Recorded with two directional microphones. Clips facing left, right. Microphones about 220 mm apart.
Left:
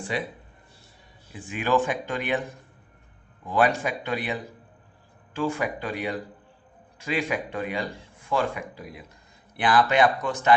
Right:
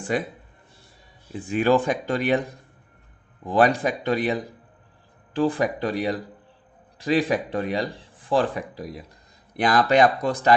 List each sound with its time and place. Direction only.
0.1 s speech: 45° right (ahead or behind)
1.3 s a man's voice: 35° right (ahead or behind)